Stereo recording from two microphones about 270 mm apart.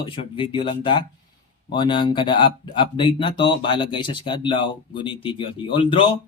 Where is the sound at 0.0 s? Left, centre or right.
Centre.